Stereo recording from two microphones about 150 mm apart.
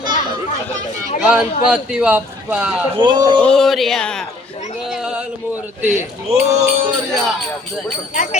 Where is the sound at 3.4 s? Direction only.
5° left (ahead or behind).